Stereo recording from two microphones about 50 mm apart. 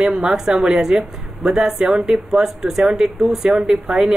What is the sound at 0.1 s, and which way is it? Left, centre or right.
A woman's voice, centre.